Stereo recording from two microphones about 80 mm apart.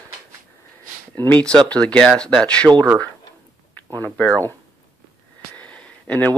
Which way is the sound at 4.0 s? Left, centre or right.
Centre.